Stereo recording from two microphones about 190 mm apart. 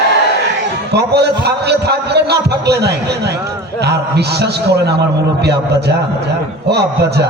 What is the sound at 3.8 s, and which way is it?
A man's voice, 60° right (ahead or behind).